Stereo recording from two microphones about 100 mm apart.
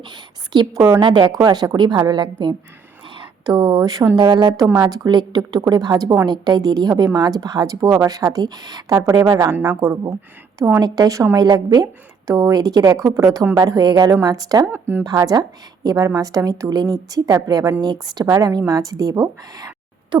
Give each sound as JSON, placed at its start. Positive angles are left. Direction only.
{"t": 0.0, "sound": "a sound", "side_deg": -50}
{"t": 0.8, "sound": "a woman's voice", "side_deg": -30}
{"t": 1.0, "sound": "a woman's voice", "side_deg": -45}
{"t": 11.4, "sound": "a woman's voice", "side_deg": -45}
{"t": 14.7, "sound": "speech", "side_deg": -20}
{"t": 15.0, "sound": "a woman's voice", "side_deg": -35}